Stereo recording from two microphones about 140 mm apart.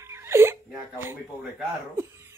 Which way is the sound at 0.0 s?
20° right (ahead or behind).